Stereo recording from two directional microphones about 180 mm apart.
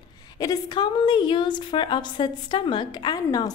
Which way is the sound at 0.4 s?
20° left (ahead or behind).